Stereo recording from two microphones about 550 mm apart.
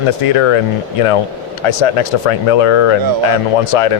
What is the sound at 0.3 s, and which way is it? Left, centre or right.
Speech, left.